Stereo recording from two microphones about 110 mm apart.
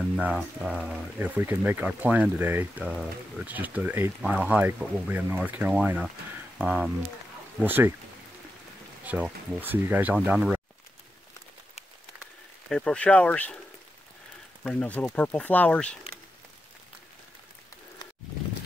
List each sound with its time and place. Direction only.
0.1 s speech: 10° right (ahead or behind)
4.2 s speech: 5° right (ahead or behind)
9.0 s speech: 15° right (ahead or behind)
12.6 s speech: 5° left (ahead or behind)
14.6 s speech: 10° left (ahead or behind)